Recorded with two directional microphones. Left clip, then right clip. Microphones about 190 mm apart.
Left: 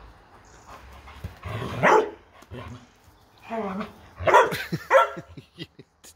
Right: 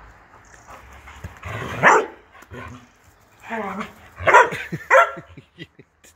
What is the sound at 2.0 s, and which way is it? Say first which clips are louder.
Dog: right 1 dB; 15° left (ahead or behind).